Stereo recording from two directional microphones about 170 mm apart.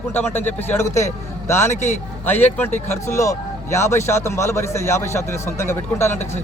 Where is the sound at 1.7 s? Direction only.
45° left (ahead or behind).